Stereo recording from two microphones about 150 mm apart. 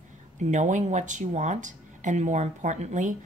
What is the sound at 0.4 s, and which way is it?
Speech, 55° right (ahead or behind).